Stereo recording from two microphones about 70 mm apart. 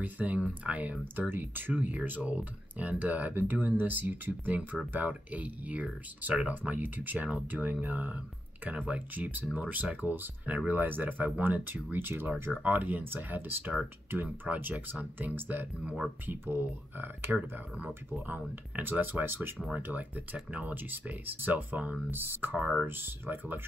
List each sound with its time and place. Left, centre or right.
0.0 s speech: centre
15.8 s speech: centre
16.3 s speech: right